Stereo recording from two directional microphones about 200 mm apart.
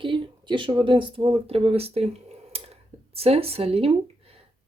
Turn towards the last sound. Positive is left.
turn(degrees=-30)  # may be behind; listen again after turning